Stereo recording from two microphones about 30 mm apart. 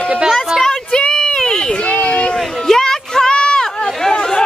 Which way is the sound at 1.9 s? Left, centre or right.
Left.